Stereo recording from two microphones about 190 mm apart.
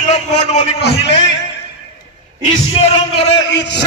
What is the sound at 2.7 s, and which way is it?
Speech, 30° left (ahead or behind).